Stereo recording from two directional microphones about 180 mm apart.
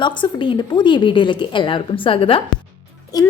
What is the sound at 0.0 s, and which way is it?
A woman's voice, 25° left (ahead or behind).